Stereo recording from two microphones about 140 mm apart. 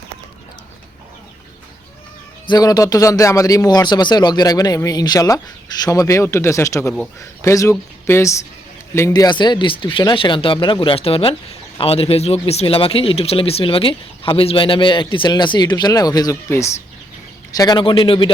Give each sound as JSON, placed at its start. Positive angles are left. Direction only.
{"t": 2.5, "sound": "a man's voice", "side_deg": 30}
{"t": 17.6, "sound": "speech", "side_deg": 30}